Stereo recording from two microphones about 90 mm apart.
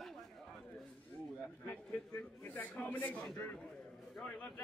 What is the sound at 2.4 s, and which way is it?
Speech, 20° left (ahead or behind).